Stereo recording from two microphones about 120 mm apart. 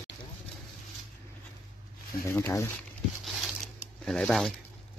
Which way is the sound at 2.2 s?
25° left (ahead or behind).